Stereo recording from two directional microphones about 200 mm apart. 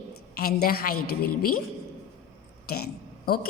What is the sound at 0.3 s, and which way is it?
Speech, 50° left (ahead or behind).